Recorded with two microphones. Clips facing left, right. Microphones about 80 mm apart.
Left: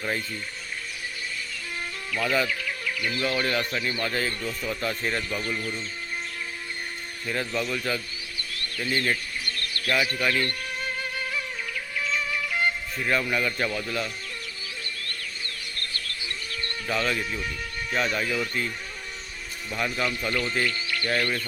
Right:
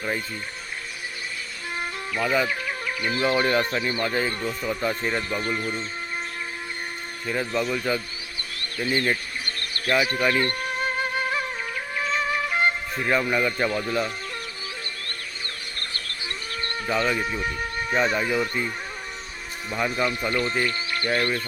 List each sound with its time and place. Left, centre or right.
1.8 s music: right
2.5 s speech: right
7.3 s a man's voice: centre
9.5 s music: right
13.1 s speech: centre
15.0 s music: right
16.5 s livestock: right
16.9 s a man's voice: centre
17.4 s a sound: right
17.9 s speech: centre
20.0 s speech: right
20.7 s music: right
21.1 s speech: right